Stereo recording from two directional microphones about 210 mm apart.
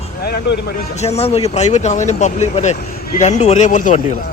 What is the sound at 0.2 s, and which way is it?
Speech, 50° left (ahead or behind).